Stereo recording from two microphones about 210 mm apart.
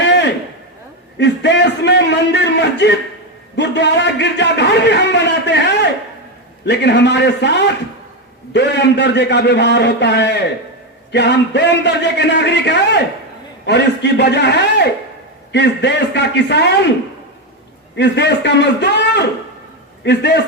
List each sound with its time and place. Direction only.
0.0 s a sound: 55° left (ahead or behind)
1.2 s a man's voice: 55° left (ahead or behind)
17.9 s a man's voice: 55° left (ahead or behind)